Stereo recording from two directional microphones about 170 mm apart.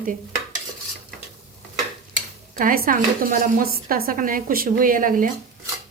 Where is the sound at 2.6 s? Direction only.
55° right (ahead or behind).